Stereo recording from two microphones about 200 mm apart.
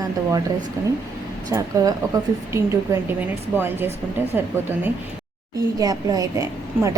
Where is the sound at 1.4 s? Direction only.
20° right (ahead or behind).